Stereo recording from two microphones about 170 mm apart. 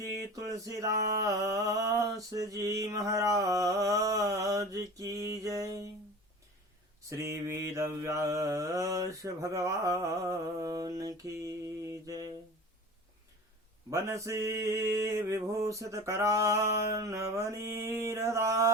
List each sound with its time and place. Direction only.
0.2 s mantra: 20° right (ahead or behind)
7.1 s mantra: 15° right (ahead or behind)
13.9 s mantra: 15° right (ahead or behind)